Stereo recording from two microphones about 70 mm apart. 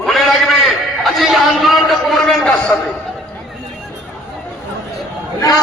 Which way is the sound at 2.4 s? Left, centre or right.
Centre.